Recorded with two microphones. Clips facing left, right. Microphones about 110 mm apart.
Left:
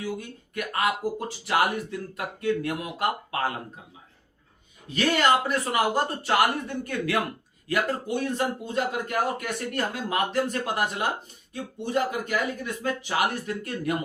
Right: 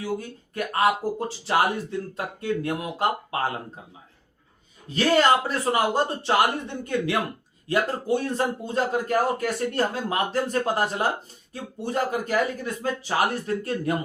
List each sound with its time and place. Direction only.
0.0 s speech: 35° right (ahead or behind)
4.9 s speech: 30° right (ahead or behind)